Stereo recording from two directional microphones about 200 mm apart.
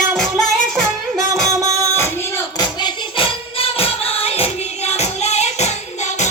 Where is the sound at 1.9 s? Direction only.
10° left (ahead or behind); by 6.3 s 35° left (ahead or behind).